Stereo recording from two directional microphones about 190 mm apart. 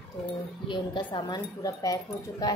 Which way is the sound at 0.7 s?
25° left (ahead or behind).